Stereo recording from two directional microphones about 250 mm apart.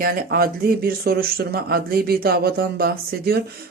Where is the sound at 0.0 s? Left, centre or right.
Right.